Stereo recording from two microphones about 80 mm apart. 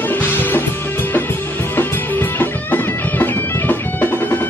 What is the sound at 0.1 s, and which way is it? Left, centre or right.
Music, left.